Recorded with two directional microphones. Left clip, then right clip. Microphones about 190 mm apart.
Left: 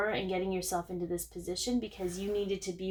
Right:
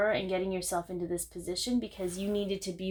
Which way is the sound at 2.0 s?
35° right (ahead or behind).